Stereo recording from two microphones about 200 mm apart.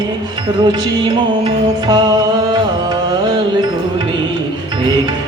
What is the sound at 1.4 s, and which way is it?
Music, 20° right (ahead or behind).